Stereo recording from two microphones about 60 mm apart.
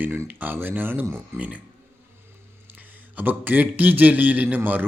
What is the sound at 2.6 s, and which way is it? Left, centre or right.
Speech, right.